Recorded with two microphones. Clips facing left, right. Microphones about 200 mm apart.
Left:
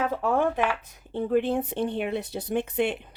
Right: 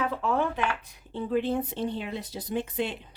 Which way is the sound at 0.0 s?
50° left (ahead or behind).